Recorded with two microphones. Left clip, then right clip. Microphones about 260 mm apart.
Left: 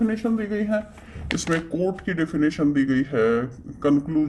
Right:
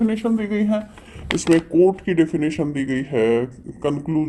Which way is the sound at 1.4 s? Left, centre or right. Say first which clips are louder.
Right 10 dB; right.